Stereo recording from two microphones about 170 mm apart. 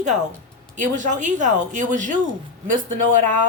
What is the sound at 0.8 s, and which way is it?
A woman's voice, 45° right (ahead or behind).